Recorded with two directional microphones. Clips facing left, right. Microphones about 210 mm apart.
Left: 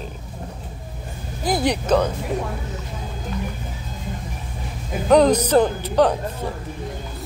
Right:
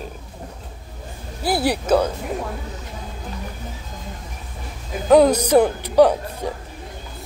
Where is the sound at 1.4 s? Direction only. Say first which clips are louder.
Even; 5° right (ahead or behind).